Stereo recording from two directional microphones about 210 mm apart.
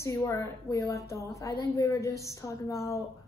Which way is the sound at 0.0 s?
15° left (ahead or behind).